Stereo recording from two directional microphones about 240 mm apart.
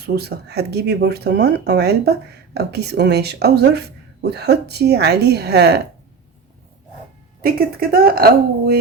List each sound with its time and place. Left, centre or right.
0.0 s speech: right
7.4 s speech: right